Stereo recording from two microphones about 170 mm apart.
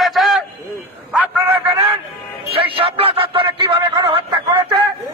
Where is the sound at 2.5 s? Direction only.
30° right (ahead or behind).